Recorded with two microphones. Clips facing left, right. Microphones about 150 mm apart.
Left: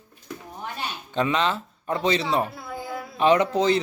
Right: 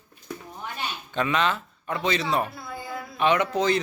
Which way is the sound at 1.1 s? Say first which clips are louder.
Left 1 dB; 25° left (ahead or behind).